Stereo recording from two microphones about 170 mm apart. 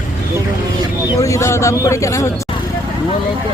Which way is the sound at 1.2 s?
20° left (ahead or behind).